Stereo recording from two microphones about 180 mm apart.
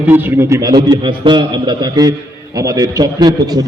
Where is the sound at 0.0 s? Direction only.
10° right (ahead or behind).